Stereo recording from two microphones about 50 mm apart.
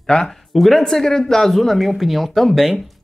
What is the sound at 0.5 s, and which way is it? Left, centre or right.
Speech, centre.